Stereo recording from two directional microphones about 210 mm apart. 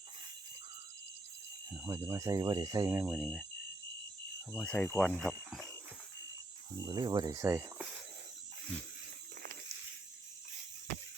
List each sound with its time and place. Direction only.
1.8 s speech: 15° right (ahead or behind)
3.2 s speech: centre (ahead or behind)
4.5 s speech: 5° left (ahead or behind)
6.8 s speech: 20° right (ahead or behind)